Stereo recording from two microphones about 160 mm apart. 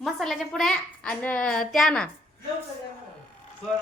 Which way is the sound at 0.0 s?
Centre (ahead or behind).